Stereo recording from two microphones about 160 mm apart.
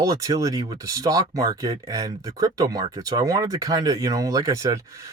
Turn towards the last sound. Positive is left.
turn(degrees=-20)  # may be behind; listen again after turning